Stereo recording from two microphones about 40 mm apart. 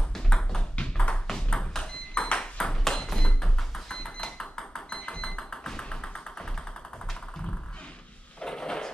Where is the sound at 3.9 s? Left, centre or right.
Left.